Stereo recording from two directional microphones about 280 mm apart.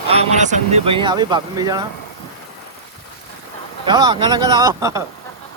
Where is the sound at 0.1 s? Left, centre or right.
Right.